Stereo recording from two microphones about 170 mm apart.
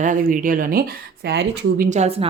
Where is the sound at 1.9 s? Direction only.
40° right (ahead or behind).